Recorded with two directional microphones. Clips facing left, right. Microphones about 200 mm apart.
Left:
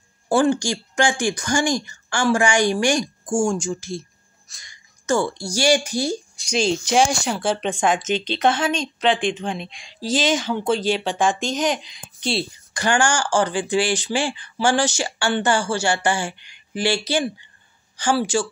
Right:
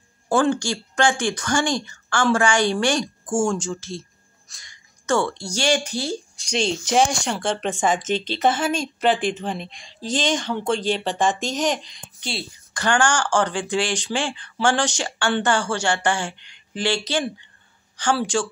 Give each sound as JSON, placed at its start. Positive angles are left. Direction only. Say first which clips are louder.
{"t": 0.3, "sound": "speech", "louder": "left 2 dB", "side_deg": 10}
{"t": 9.7, "sound": "speech", "louder": "right 1 dB", "side_deg": 90}
{"t": 9.9, "sound": "speech", "louder": "left 2 dB", "side_deg": 5}
{"t": 12.2, "sound": "speech", "louder": "left 7 dB", "side_deg": 25}
{"t": 12.7, "sound": "speech", "louder": "left 1 dB", "side_deg": 10}